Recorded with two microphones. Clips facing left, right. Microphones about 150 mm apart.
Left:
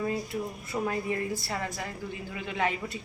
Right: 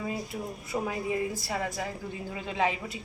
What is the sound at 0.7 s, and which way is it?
Speech, 15° right (ahead or behind).